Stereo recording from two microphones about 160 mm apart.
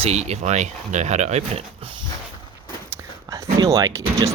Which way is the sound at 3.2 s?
20° right (ahead or behind).